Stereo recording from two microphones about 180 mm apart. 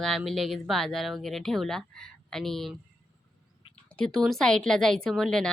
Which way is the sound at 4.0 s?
5° left (ahead or behind).